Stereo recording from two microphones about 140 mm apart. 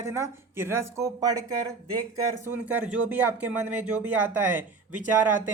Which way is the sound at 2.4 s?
15° right (ahead or behind).